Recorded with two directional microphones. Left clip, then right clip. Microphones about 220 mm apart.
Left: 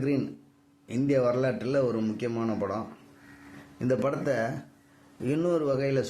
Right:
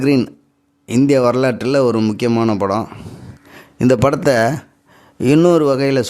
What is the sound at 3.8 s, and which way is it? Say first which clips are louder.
Speech: right 14 dB; 50° right (ahead or behind).